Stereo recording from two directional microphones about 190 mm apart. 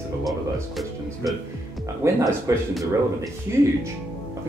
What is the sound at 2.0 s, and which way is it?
Speech, 15° right (ahead or behind).